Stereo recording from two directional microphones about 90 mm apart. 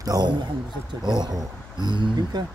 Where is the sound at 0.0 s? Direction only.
45° right (ahead or behind).